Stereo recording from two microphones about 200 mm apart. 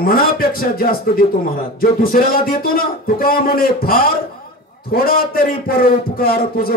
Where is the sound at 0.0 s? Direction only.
45° left (ahead or behind).